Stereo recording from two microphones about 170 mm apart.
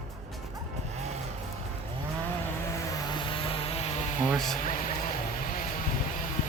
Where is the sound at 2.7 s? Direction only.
30° left (ahead or behind).